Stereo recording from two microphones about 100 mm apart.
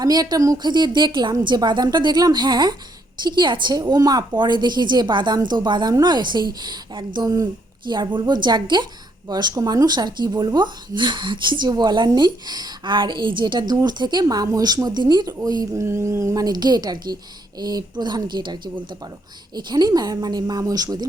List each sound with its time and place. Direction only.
0.0 s a woman's voice: 40° right (ahead or behind)